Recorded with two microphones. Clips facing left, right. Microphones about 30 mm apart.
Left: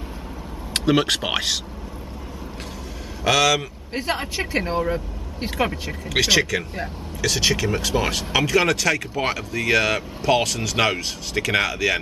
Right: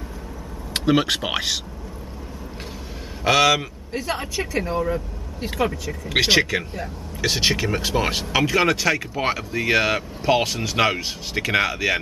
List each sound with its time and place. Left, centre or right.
0.7 s speech: centre
3.3 s speech: centre
3.9 s speech: left
6.0 s speech: right